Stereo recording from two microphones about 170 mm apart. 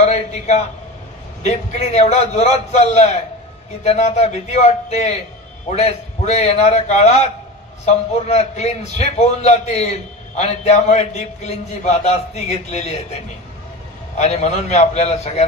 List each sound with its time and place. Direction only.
0.1 s a man's voice: 40° left (ahead or behind)
14.1 s a man's voice: 40° left (ahead or behind)